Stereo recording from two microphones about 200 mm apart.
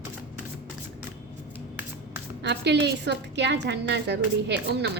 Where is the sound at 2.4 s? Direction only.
60° right (ahead or behind).